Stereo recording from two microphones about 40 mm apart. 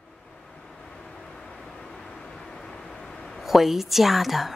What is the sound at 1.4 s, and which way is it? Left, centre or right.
Vehicle, centre.